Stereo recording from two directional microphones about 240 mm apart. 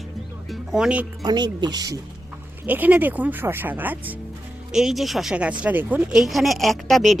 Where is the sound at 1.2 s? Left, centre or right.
Centre.